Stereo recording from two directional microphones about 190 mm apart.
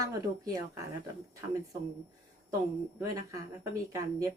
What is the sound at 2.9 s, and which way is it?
Speech, 20° right (ahead or behind).